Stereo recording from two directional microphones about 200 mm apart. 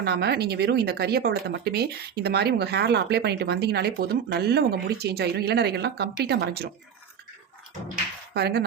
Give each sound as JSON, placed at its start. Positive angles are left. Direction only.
{"t": 0.0, "sound": "speech", "side_deg": -55}
{"t": 8.3, "sound": "speech", "side_deg": -55}